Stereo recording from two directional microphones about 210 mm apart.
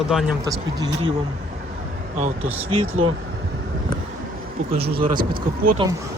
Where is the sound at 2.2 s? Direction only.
30° right (ahead or behind).